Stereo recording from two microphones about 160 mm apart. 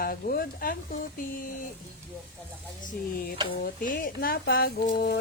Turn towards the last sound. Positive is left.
turn(degrees=65)  # may be behind; listen again after turning